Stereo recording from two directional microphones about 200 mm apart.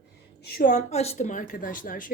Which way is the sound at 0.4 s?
40° left (ahead or behind).